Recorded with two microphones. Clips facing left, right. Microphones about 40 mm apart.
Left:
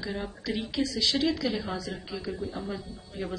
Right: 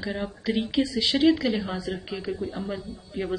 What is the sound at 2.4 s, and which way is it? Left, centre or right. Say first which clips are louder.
Speech: right 3 dB; centre.